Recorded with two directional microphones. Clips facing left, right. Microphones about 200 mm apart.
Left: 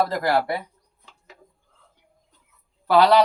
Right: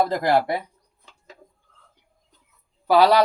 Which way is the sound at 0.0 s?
20° right (ahead or behind).